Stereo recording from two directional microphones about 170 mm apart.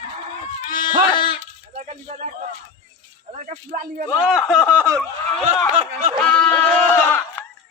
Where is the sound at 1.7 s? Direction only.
45° right (ahead or behind).